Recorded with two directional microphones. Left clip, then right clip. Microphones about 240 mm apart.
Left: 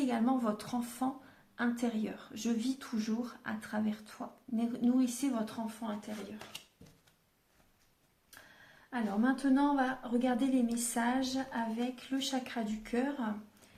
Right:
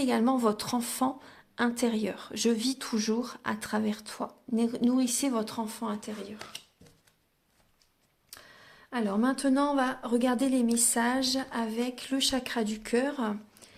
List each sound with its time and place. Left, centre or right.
0.0 s speech: right
8.9 s speech: right